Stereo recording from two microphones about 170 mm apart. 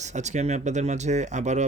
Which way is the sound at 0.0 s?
45° right (ahead or behind).